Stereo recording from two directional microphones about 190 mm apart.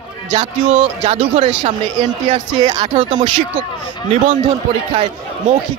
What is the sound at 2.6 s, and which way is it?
Speech, 20° right (ahead or behind).